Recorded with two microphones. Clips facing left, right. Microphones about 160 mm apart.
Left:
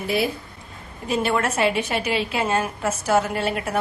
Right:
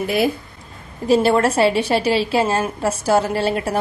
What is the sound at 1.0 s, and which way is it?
A woman's voice, 35° right (ahead or behind).